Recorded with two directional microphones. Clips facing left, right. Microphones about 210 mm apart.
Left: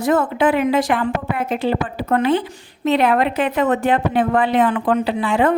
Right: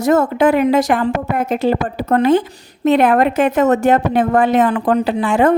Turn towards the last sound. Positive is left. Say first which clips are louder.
# right 4 dB
turn(degrees=-45)  # may be behind; listen again after turning